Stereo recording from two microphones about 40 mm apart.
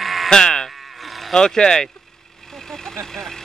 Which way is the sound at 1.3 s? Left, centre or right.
Centre.